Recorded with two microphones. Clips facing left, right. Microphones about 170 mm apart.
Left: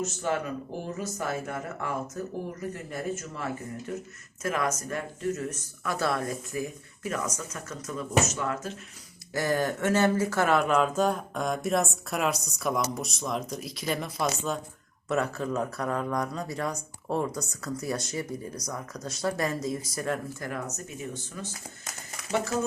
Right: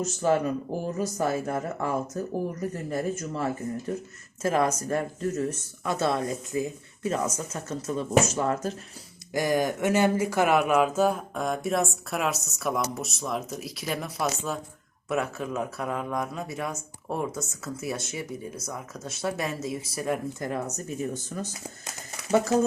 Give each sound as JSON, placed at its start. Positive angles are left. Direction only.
{"t": 0.0, "sound": "speech", "side_deg": -35}
{"t": 9.3, "sound": "speech", "side_deg": -15}
{"t": 20.4, "sound": "speech", "side_deg": -25}